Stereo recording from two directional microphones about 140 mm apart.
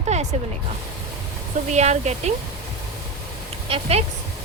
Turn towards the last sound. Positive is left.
turn(degrees=-45)  # may be behind; listen again after turning